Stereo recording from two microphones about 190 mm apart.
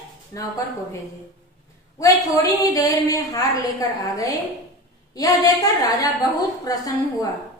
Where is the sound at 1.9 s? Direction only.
15° left (ahead or behind).